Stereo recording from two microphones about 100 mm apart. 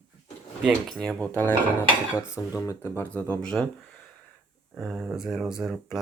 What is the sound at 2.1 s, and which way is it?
Speech, 35° left (ahead or behind).